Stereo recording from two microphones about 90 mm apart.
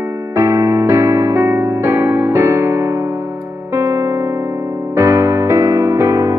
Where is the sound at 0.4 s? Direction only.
35° right (ahead or behind).